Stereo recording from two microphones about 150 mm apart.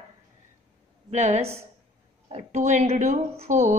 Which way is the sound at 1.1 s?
50° right (ahead or behind).